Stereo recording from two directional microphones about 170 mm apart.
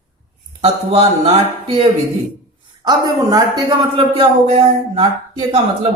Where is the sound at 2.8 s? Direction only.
25° right (ahead or behind).